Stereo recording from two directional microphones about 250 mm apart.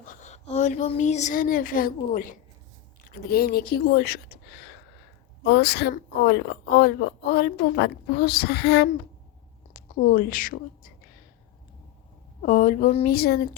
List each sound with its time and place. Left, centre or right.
0.0 s speech: left
3.2 s a woman's voice: left
12.4 s a woman's voice: left